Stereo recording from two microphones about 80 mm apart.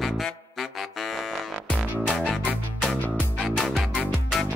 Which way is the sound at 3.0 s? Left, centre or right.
Centre.